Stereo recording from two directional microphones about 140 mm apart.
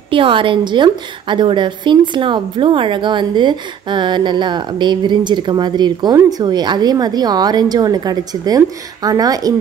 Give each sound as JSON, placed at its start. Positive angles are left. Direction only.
{"t": 0.1, "sound": "a woman's voice", "side_deg": -40}